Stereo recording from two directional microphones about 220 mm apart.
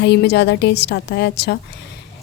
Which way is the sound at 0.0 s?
50° left (ahead or behind).